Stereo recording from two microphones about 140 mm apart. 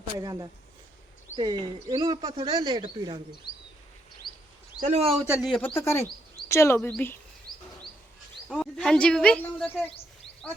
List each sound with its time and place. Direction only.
0.2 s speech: 30° right (ahead or behind)
4.2 s a sound: 90° left
4.8 s speech: 50° right (ahead or behind)
5.4 s speech: centre (ahead or behind)
5.6 s speech: 20° left (ahead or behind)
8.4 s speech: 5° left (ahead or behind)